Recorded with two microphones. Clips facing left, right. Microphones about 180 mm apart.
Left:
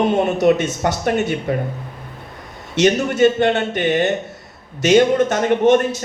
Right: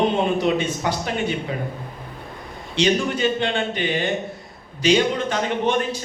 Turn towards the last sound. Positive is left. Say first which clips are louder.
# left 7 dB
turn(degrees=50)  # may be behind; listen again after turning